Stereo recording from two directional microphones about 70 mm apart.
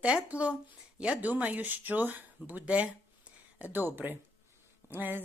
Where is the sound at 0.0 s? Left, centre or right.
Centre.